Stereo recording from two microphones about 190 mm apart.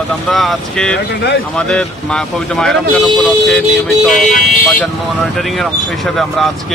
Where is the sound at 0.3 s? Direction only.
Centre (ahead or behind).